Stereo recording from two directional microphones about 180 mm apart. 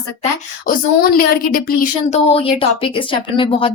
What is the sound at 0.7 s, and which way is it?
A woman's voice, 55° left (ahead or behind).